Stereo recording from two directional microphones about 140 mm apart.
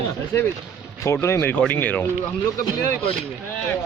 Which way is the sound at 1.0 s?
20° left (ahead or behind).